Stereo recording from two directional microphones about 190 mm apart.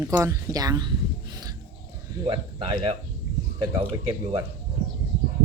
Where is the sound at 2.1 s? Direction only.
20° right (ahead or behind).